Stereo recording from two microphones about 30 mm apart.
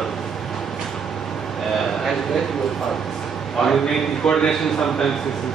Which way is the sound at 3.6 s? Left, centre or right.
Centre.